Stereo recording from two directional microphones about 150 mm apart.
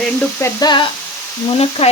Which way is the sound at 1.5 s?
40° left (ahead or behind).